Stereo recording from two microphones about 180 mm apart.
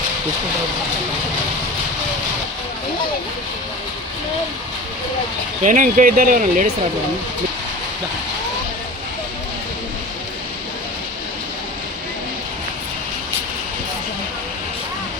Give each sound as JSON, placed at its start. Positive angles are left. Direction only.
{"t": 5.6, "sound": "speech", "side_deg": -45}